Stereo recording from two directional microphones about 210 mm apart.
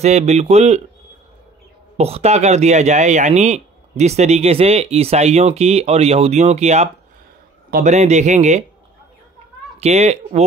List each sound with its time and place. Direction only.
0.0 s speech: 30° right (ahead or behind)
2.0 s speech: 30° right (ahead or behind)
9.8 s speech: 30° right (ahead or behind)